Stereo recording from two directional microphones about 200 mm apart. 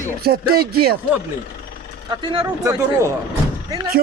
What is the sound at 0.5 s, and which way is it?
Speech, 50° right (ahead or behind).